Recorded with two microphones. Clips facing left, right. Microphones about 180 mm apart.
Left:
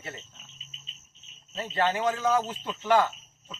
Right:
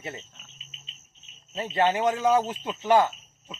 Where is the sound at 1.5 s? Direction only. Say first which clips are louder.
Right 3 dB; 15° right (ahead or behind).